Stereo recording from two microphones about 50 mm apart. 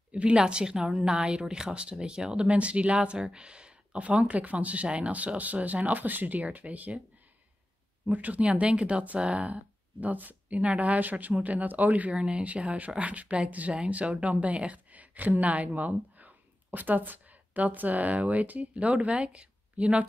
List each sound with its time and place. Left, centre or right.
0.1 s speech: right
0.8 s speech: centre
2.5 s speech: right
8.1 s speech: right
12.1 s speech: centre